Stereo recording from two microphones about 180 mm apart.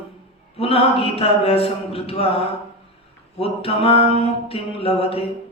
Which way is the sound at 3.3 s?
30° left (ahead or behind).